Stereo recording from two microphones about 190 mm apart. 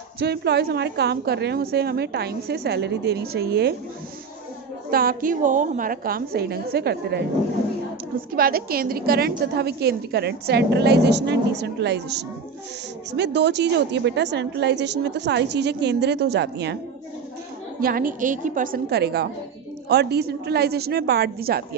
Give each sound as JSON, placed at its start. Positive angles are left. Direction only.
{"t": 0.2, "sound": "a woman's voice", "side_deg": -60}
{"t": 4.9, "sound": "a woman's voice", "side_deg": -50}
{"t": 8.4, "sound": "a woman's voice", "side_deg": -50}
{"t": 17.7, "sound": "a woman's voice", "side_deg": -50}